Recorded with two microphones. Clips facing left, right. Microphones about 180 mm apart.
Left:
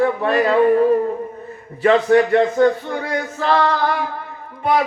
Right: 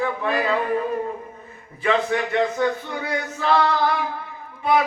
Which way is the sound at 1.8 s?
45° left (ahead or behind).